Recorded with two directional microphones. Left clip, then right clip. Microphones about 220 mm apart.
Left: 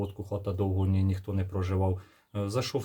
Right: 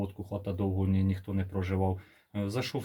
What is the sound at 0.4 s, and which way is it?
Speech, 20° left (ahead or behind).